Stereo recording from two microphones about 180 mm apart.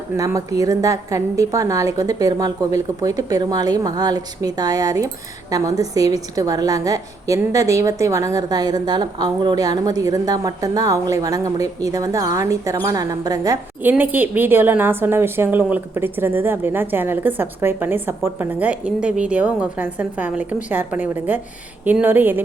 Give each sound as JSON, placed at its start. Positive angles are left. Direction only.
{"t": 0.2, "sound": "a woman's voice", "side_deg": -20}